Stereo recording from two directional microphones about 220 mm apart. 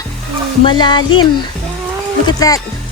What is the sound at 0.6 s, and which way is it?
Speech, 20° left (ahead or behind).